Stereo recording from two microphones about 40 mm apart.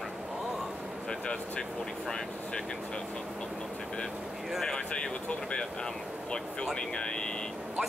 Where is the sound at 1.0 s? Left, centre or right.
Left.